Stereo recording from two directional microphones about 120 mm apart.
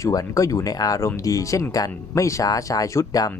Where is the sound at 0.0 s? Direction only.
30° left (ahead or behind).